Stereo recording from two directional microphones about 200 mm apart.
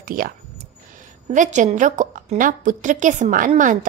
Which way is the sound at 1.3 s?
40° right (ahead or behind).